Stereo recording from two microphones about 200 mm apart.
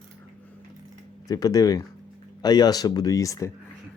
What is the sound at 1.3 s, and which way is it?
Speech, 15° left (ahead or behind).